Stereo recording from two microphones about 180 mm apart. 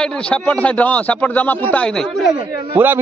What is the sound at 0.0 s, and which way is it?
A man's voice, 5° left (ahead or behind).